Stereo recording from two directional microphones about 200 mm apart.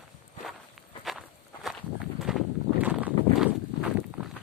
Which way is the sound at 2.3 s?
5° right (ahead or behind).